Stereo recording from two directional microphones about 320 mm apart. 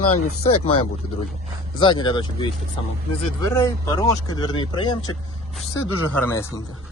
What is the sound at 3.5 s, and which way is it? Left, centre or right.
Speech, centre.